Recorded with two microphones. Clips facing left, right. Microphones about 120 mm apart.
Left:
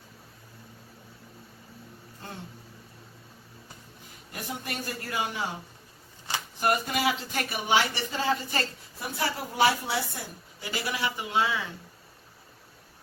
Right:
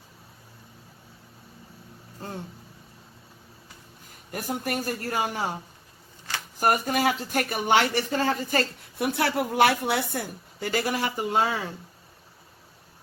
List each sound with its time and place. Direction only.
4.3 s a woman's voice: 45° right (ahead or behind)
6.6 s a woman's voice: 45° right (ahead or behind)
9.0 s a woman's voice: 65° right (ahead or behind); by 11.7 s 45° right (ahead or behind)